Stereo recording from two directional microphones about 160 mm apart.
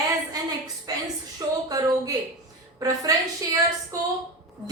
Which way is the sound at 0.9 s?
25° right (ahead or behind).